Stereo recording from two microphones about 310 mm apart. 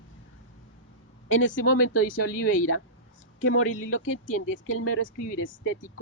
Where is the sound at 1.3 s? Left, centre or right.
Left.